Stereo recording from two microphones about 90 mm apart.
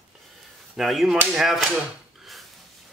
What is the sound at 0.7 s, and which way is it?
Speech, centre (ahead or behind).